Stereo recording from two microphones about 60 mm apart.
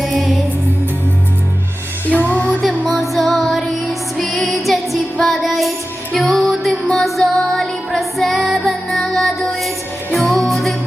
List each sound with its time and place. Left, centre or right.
0.0 s music: centre
2.2 s music: left
2.6 s music: centre